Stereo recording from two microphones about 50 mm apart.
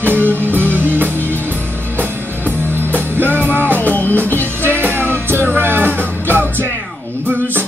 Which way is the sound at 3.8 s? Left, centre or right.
Left.